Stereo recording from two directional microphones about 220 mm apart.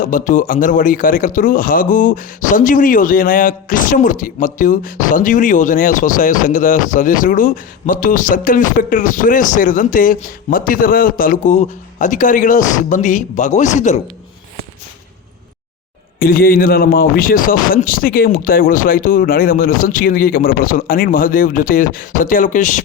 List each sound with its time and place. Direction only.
0.0 s speech: 35° left (ahead or behind)
16.1 s speech: 40° left (ahead or behind)